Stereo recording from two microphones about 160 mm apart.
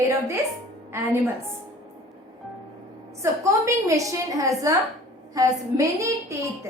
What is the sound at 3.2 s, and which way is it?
A woman's voice, 20° right (ahead or behind).